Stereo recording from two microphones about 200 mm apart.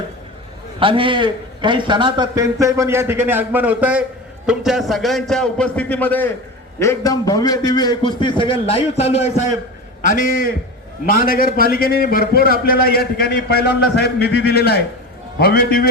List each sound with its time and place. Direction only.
0.8 s a man's voice: 25° right (ahead or behind); by 15.8 s 50° left (ahead or behind)